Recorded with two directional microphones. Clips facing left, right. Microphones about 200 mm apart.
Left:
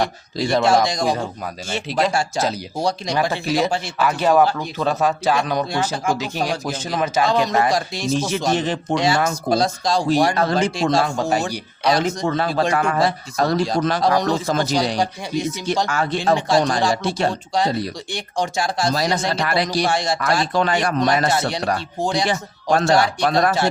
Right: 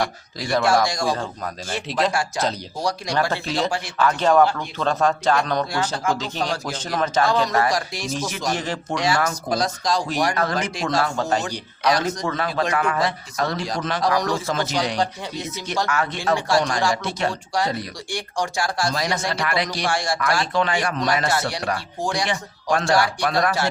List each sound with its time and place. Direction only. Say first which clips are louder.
0.0 s speech: left 4 dB; 25° left (ahead or behind)
1.9 s speech: left 2 dB; centre (ahead or behind)
2.8 s speech: left 2 dB; 20° left (ahead or behind)
7.3 s speech: left 2 dB; 20° left (ahead or behind)
11.2 s speech: left 2 dB; 10° left (ahead or behind)
11.9 s speech: left 3 dB; 25° left (ahead or behind)
14.4 s speech: left 4 dB; 35° left (ahead or behind)
15.9 s speech: left 1 dB; 30° left (ahead or behind)
16.9 s speech: left 4 dB; 30° left (ahead or behind)
18.9 s speech: left 4 dB; 35° left (ahead or behind)
19.9 s speech: left 2 dB; 20° left (ahead or behind); by 20.9 s 40° left (ahead or behind)
21.2 s speech: left 3 dB; 20° left (ahead or behind)